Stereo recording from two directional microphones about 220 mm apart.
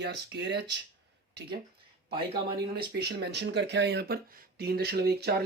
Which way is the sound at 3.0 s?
50° right (ahead or behind).